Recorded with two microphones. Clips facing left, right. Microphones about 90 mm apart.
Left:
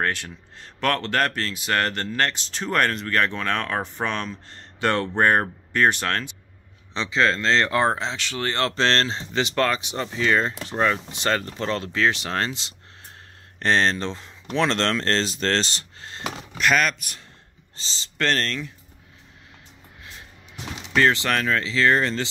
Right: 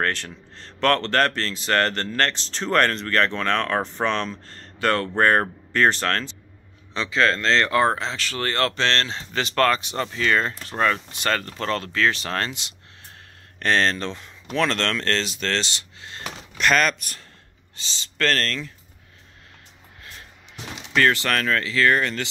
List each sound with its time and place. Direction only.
0.0 s speech: 10° left (ahead or behind)
4.5 s speech: 20° left (ahead or behind)
8.7 s speech: 30° left (ahead or behind)
16.3 s speech: 5° left (ahead or behind)
17.7 s speech: 25° left (ahead or behind)
20.9 s speech: 20° left (ahead or behind)